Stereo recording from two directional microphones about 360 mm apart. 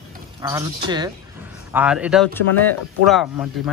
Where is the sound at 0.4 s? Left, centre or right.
Centre.